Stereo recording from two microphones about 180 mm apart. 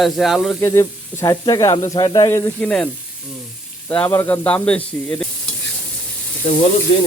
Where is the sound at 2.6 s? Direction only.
5° left (ahead or behind).